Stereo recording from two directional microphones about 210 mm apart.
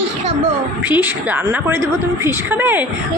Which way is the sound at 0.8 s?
10° right (ahead or behind).